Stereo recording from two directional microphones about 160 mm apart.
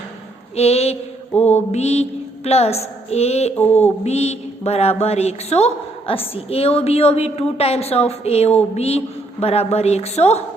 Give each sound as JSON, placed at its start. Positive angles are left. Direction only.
{"t": 0.5, "sound": "a woman's voice", "side_deg": 40}
{"t": 3.5, "sound": "mantra", "side_deg": 10}
{"t": 4.0, "sound": "a woman's voice", "side_deg": 40}